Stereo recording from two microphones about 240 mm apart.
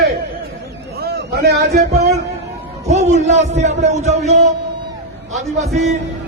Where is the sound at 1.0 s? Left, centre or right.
Right.